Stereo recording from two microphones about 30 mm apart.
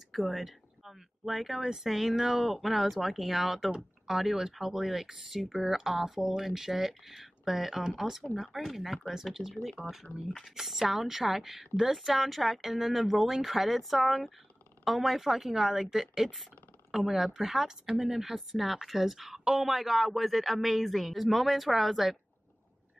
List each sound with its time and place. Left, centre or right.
0.1 s speech: centre
8.2 s speech: left
8.5 s speech: centre
15.0 s speech: centre